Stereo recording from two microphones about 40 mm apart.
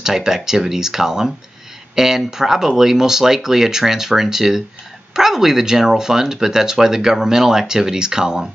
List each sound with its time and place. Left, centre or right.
0.0 s speech: centre